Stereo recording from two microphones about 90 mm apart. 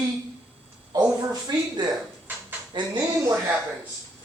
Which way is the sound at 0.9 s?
45° right (ahead or behind).